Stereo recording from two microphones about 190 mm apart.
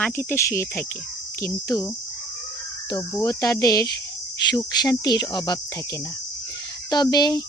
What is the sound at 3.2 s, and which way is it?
Speech, 15° left (ahead or behind).